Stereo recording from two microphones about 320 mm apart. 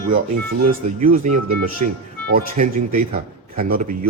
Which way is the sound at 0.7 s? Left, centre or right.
Right.